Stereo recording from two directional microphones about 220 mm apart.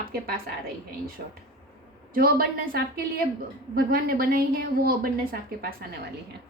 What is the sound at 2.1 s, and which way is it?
A woman's voice, 40° right (ahead or behind).